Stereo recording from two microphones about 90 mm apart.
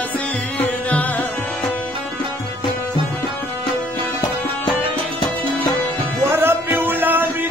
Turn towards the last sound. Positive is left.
turn(degrees=-20)  # may be behind; listen again after turning